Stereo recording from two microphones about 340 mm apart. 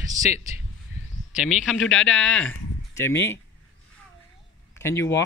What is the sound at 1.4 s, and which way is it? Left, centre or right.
Speech, centre.